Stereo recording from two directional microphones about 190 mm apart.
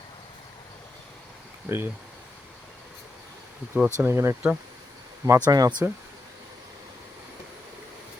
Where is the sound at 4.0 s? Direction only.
15° right (ahead or behind).